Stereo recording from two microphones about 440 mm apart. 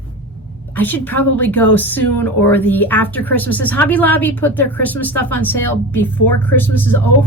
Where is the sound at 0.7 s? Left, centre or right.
Centre.